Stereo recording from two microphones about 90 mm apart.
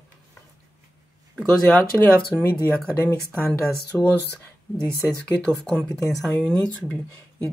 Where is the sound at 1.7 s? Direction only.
15° left (ahead or behind).